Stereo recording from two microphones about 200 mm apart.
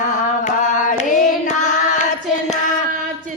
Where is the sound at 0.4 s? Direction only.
40° left (ahead or behind).